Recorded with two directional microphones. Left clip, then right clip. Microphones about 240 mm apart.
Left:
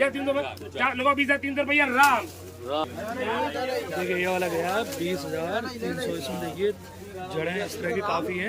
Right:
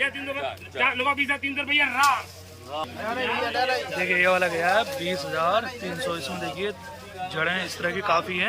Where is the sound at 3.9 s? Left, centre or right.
Centre.